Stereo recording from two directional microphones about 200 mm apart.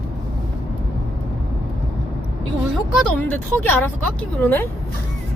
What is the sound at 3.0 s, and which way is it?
Speech, 10° left (ahead or behind).